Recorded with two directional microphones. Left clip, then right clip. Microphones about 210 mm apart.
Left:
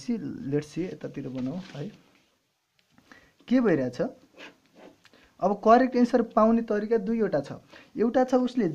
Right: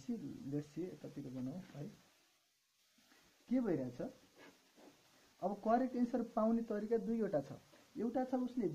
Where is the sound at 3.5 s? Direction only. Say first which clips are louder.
Left 15 dB; 35° left (ahead or behind).